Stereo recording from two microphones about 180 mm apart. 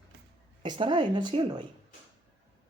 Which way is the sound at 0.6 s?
25° right (ahead or behind).